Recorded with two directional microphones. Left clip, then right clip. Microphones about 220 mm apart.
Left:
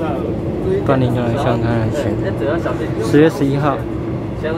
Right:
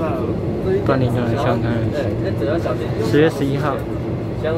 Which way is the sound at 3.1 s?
5° left (ahead or behind).